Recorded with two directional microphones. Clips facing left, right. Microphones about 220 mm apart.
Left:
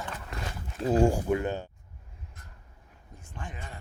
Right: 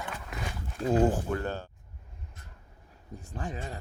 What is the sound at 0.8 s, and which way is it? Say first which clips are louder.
Speech: left 1 dB; 10° left (ahead or behind).